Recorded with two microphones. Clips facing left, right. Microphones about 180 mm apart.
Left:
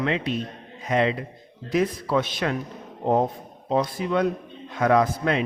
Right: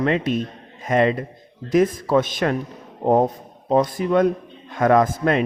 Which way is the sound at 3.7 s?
45° right (ahead or behind).